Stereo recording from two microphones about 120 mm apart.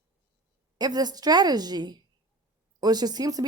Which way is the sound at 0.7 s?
35° right (ahead or behind).